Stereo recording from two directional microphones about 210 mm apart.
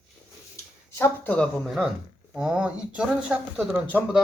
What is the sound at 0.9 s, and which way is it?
Speech, 10° left (ahead or behind).